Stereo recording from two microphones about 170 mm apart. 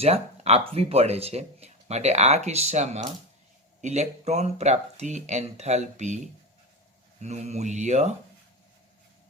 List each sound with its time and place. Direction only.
0.0 s speech: 40° right (ahead or behind)
7.2 s speech: 40° right (ahead or behind)